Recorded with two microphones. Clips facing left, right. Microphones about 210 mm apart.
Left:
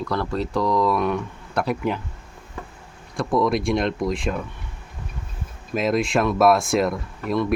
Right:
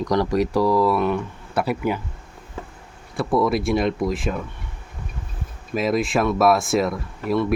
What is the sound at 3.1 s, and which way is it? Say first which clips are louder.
Speech: right 1 dB; 5° right (ahead or behind).